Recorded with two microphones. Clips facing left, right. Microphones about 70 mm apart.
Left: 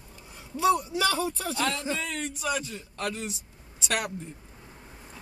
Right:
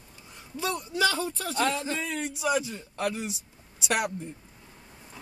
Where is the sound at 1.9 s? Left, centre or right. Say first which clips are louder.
Right 1 dB; centre.